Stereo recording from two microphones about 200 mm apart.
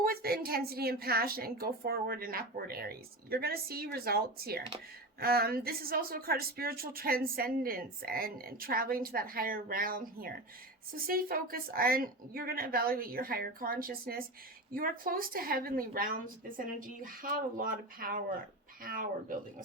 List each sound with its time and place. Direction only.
0.0 s a woman's voice: 50° right (ahead or behind)